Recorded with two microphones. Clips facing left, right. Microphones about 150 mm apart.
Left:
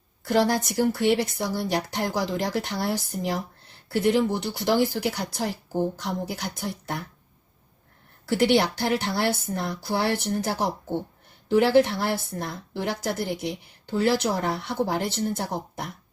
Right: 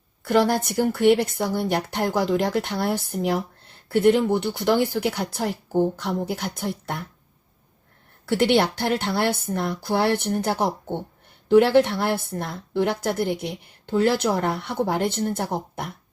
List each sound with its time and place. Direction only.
0.3 s a woman's voice: 55° right (ahead or behind)
8.3 s a woman's voice: 55° right (ahead or behind)